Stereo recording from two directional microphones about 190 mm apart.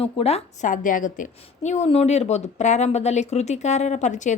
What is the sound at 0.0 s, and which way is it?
A woman's voice, 30° left (ahead or behind).